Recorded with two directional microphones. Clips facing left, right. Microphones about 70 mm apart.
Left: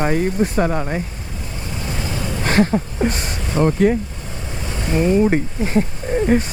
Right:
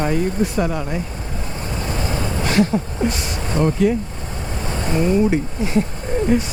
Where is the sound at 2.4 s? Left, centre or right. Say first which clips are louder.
Left 2 dB; left.